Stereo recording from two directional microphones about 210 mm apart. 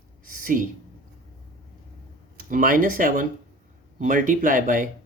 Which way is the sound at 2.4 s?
40° right (ahead or behind).